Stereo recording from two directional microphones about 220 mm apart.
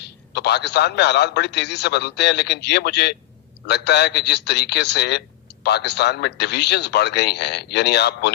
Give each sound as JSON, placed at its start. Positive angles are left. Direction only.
{"t": 0.0, "sound": "a man's voice", "side_deg": 50}